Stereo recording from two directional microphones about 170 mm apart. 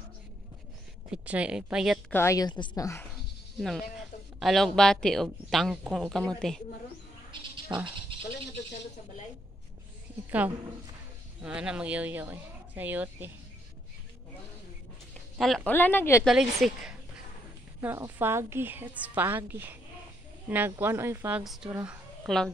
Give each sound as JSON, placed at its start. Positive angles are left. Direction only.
{"t": 1.1, "sound": "speech", "side_deg": -5}
{"t": 2.0, "sound": "a woman's voice", "side_deg": 15}
{"t": 3.5, "sound": "speech", "side_deg": 0}
{"t": 7.3, "sound": "a sound", "side_deg": -30}
{"t": 10.4, "sound": "a woman's voice", "side_deg": -10}
{"t": 15.3, "sound": "speech", "side_deg": 0}
{"t": 15.7, "sound": "speech", "side_deg": 10}
{"t": 16.3, "sound": "speech", "side_deg": 0}
{"t": 17.7, "sound": "a woman's voice", "side_deg": -15}